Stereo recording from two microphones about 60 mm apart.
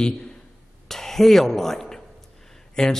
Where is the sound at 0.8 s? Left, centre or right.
Centre.